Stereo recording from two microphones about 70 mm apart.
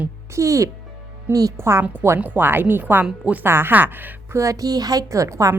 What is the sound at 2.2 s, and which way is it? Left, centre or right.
Speech, right.